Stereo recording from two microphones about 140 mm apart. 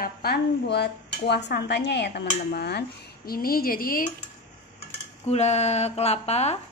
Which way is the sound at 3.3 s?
90° left.